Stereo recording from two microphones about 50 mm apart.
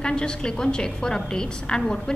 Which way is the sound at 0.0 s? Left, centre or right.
Centre.